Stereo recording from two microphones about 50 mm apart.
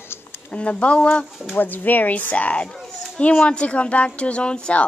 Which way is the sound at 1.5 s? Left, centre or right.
Left.